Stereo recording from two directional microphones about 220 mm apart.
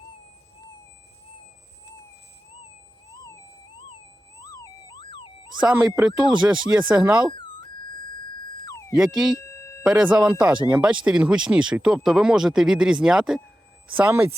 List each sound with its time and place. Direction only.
4.5 s car alarm: 20° left (ahead or behind)
5.5 s speech: 5° right (ahead or behind)
9.0 s speech: centre (ahead or behind)
9.5 s a sound: 15° left (ahead or behind)
9.8 s speech: 5° right (ahead or behind)